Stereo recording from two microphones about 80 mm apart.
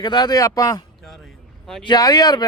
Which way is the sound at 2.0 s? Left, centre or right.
Left.